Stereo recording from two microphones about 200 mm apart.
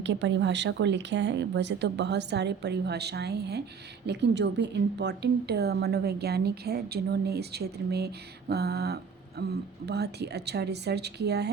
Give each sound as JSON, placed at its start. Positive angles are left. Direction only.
{"t": 0.0, "sound": "a woman's voice", "side_deg": -60}